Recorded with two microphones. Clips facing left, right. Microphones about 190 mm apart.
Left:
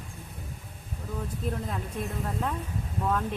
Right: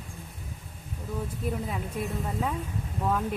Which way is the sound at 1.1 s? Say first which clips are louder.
Right 1 dB; 5° right (ahead or behind).